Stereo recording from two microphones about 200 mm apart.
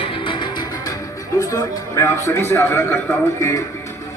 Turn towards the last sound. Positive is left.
turn(degrees=15)  # may be behind; listen again after turning